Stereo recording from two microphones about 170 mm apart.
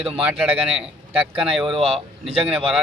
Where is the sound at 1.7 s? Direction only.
35° right (ahead or behind).